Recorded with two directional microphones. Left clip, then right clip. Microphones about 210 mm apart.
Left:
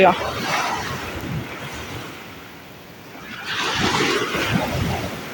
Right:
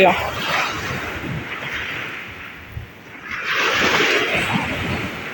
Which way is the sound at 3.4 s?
55° left (ahead or behind).